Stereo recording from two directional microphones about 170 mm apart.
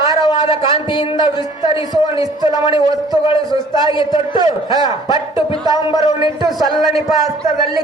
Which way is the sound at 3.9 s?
30° left (ahead or behind).